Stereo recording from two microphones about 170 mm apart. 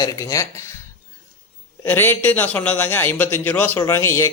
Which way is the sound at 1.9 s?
10° left (ahead or behind).